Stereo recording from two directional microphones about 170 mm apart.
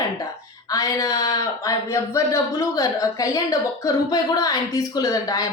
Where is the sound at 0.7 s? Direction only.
20° left (ahead or behind).